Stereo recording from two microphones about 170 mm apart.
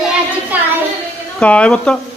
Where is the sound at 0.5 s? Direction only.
10° right (ahead or behind).